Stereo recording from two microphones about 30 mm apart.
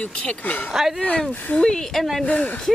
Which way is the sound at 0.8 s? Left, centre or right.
Centre.